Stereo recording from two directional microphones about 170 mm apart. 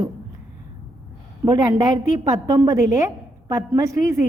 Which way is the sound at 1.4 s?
20° right (ahead or behind).